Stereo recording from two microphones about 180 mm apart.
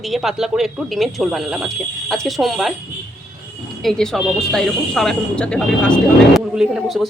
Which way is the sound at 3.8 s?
5° left (ahead or behind).